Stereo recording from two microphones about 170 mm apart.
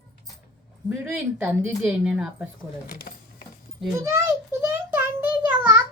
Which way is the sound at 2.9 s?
60° left (ahead or behind).